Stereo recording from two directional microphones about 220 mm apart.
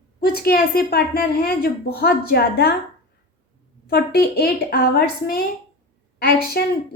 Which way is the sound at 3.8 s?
45° left (ahead or behind).